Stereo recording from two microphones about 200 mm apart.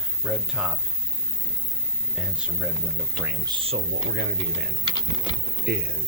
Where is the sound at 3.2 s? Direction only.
20° right (ahead or behind).